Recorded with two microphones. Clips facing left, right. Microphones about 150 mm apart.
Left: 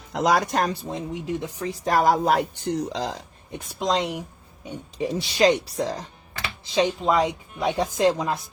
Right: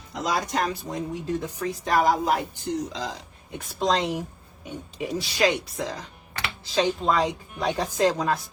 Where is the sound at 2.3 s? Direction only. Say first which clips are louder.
Left 3 dB; 70° left (ahead or behind).